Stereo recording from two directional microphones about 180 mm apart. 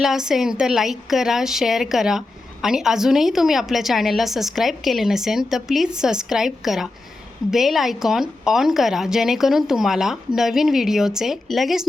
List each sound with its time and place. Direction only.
0.0 s a woman's voice: centre (ahead or behind)